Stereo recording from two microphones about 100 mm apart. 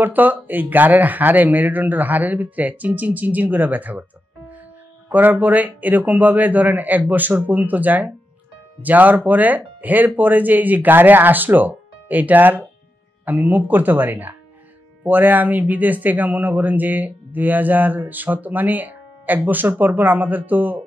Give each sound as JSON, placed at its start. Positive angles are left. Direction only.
{"t": 0.0, "sound": "speech", "side_deg": -20}
{"t": 5.1, "sound": "speech", "side_deg": -15}